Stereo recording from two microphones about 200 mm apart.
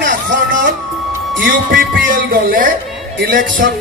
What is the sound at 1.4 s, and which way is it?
Speech, 45° right (ahead or behind).